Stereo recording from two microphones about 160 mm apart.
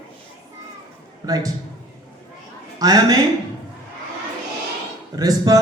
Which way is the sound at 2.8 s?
20° right (ahead or behind).